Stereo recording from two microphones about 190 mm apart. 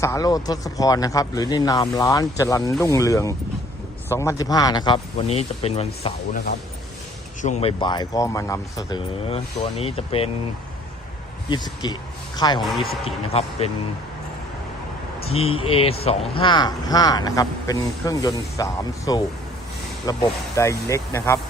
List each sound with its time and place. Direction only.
0.0 s speech: 15° left (ahead or behind); by 6.4 s 35° left (ahead or behind)
7.4 s speech: 35° left (ahead or behind); by 9.0 s 15° left (ahead or behind)
9.3 s speech: 30° left (ahead or behind)
11.4 s speech: 20° left (ahead or behind)
15.2 s speech: 30° left (ahead or behind); by 21.3 s 15° left (ahead or behind)